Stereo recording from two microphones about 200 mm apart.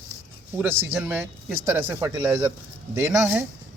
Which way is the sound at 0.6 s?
10° right (ahead or behind).